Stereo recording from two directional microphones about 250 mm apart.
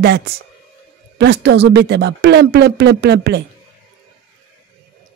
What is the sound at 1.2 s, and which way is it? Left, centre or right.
Speech, right.